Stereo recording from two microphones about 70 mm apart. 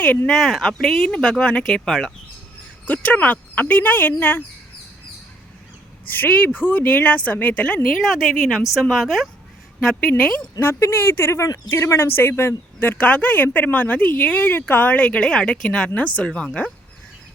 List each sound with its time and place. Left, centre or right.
0.3 s a woman's voice: centre
2.8 s speech: left
6.1 s speech: left
8.0 s a woman's voice: centre
9.8 s speech: centre
10.6 s speech: left; by 16.7 s centre